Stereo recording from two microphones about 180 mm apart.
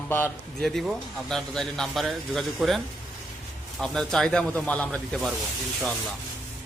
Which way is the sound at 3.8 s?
5° left (ahead or behind).